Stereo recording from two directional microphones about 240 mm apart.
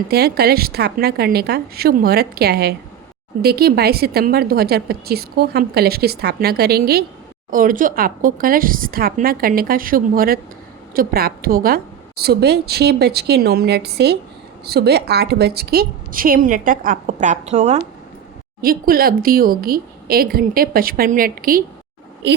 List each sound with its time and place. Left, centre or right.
0.1 s a woman's voice: right